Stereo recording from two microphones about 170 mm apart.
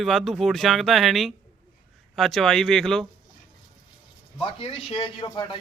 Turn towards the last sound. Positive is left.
turn(degrees=30)  # may be behind; listen again after turning